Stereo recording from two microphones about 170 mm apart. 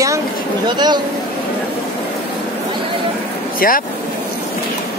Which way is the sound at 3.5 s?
55° left (ahead or behind).